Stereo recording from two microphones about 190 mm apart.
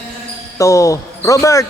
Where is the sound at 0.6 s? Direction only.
15° left (ahead or behind).